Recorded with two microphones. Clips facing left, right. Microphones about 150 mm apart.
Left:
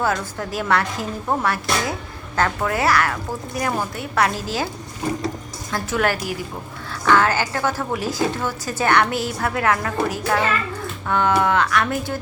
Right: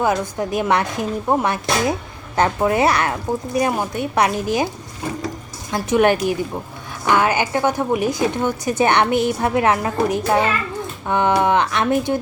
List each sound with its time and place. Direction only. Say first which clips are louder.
0.0 s speech: right 4 dB; 20° right (ahead or behind)
5.7 s speech: right 6 dB; 20° right (ahead or behind)